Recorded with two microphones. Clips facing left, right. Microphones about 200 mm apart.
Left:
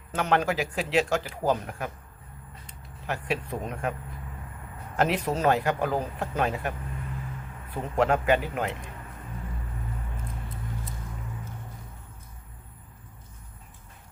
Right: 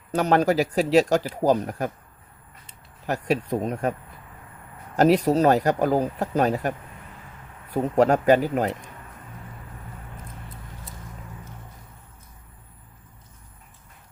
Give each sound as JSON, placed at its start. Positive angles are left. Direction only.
{"t": 0.1, "sound": "speech", "side_deg": -40}
{"t": 3.1, "sound": "speech", "side_deg": -40}
{"t": 4.9, "sound": "speech", "side_deg": -40}